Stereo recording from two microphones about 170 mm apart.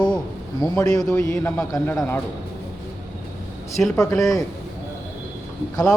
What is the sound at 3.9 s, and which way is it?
Speech, 20° left (ahead or behind).